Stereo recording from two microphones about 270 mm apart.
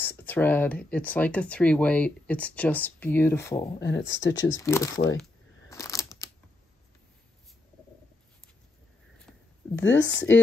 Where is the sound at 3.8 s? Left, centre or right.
Left.